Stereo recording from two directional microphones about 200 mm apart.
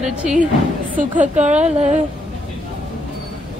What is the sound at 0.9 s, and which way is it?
Speech, 40° right (ahead or behind).